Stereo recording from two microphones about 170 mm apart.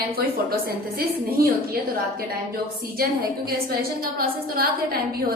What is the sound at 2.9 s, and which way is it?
Speech, 60° right (ahead or behind).